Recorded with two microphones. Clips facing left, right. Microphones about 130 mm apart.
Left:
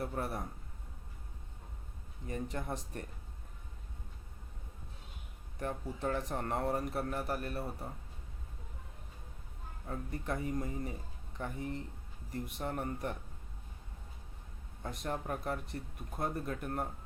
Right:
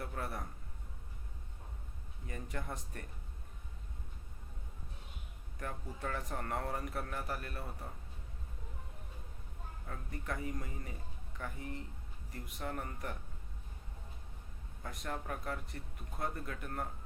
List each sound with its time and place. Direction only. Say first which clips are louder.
0.0 s speech: left 4 dB; 25° left (ahead or behind)
2.2 s speech: left 5 dB; 25° left (ahead or behind)
5.5 s speech: left 5 dB; 30° left (ahead or behind)
9.8 s speech: left 5 dB; 25° left (ahead or behind)
14.8 s speech: left 4 dB; 25° left (ahead or behind)